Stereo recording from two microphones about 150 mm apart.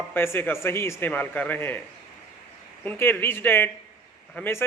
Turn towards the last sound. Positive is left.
turn(degrees=15)  # may be behind; listen again after turning